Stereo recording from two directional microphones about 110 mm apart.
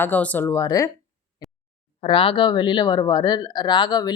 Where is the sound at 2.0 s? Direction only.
55° left (ahead or behind); by 4.1 s 40° left (ahead or behind).